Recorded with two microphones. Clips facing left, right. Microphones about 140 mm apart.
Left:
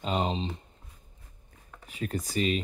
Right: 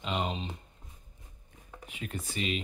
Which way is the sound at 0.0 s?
35° left (ahead or behind).